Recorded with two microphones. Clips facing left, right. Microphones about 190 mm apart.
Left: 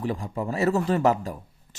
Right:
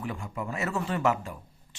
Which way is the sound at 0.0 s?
35° left (ahead or behind).